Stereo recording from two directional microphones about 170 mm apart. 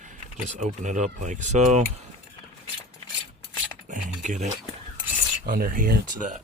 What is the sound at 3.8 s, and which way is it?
Speech, 50° right (ahead or behind).